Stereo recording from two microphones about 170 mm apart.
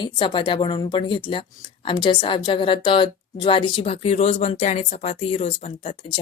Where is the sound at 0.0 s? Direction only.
30° left (ahead or behind).